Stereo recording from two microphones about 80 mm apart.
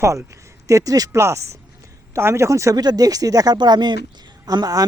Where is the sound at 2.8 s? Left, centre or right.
Right.